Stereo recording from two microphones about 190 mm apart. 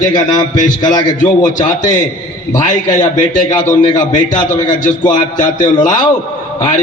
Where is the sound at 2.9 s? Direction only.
40° left (ahead or behind).